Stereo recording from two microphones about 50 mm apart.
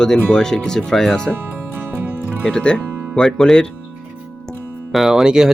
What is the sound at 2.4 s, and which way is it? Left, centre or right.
Speech, centre.